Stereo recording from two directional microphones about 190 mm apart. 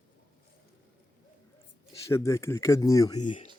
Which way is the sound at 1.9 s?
15° left (ahead or behind).